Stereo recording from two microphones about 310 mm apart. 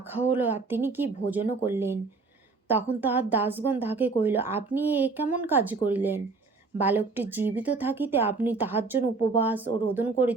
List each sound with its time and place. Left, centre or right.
0.1 s speech: centre
9.1 s speech: left
9.4 s speech: centre